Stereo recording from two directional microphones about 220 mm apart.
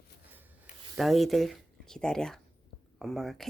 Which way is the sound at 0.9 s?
Centre (ahead or behind).